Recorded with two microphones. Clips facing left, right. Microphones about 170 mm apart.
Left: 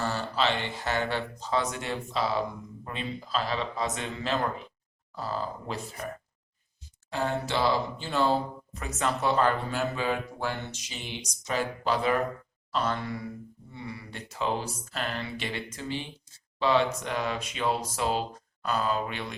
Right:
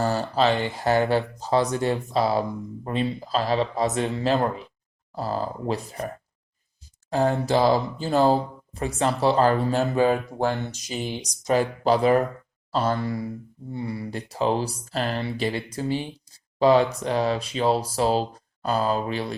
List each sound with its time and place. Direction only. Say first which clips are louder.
0.0 s speech: right 6 dB; 40° right (ahead or behind)
7.1 s speech: right 8 dB; 40° right (ahead or behind)